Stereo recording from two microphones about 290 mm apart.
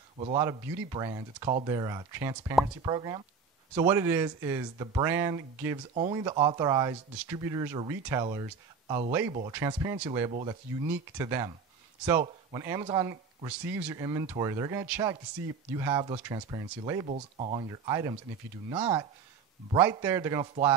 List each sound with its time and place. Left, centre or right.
0.2 s speech: centre